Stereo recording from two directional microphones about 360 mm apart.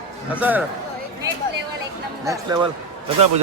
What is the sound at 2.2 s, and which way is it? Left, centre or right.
Speech, centre.